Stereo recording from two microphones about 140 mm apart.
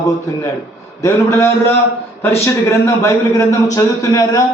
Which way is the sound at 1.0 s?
20° left (ahead or behind).